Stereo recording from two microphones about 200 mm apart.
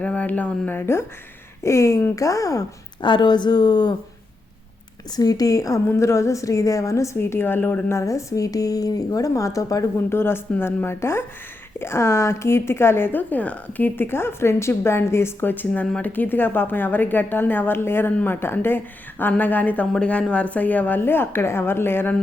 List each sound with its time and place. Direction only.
0.0 s a woman's voice: 5° left (ahead or behind)
5.1 s a woman's voice: 20° left (ahead or behind)